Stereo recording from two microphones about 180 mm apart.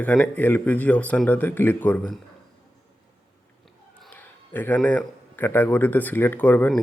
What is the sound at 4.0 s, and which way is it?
A man's voice, 10° left (ahead or behind).